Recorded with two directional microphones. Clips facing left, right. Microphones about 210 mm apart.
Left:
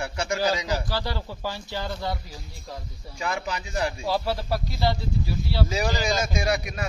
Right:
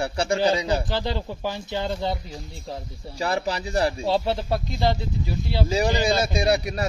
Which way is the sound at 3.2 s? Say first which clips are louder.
Right 4 dB; 35° right (ahead or behind).